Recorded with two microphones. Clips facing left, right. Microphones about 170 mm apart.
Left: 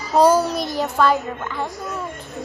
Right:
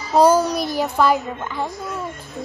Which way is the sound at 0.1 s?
Centre (ahead or behind).